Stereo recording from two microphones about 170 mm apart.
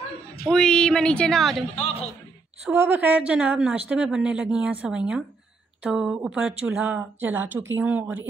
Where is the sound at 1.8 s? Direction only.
35° left (ahead or behind).